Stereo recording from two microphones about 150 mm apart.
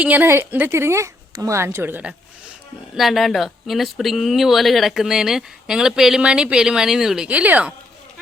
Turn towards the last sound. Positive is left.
turn(degrees=-10)  # may be behind; listen again after turning